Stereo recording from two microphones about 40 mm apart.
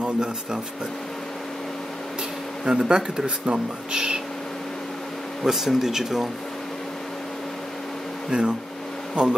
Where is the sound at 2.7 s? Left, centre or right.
Centre.